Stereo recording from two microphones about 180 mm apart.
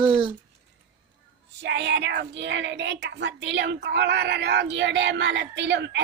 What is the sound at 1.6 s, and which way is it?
A woman's voice, 75° right (ahead or behind).